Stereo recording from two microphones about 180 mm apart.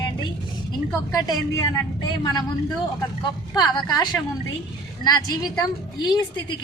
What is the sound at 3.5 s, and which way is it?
A woman's voice, 20° left (ahead or behind).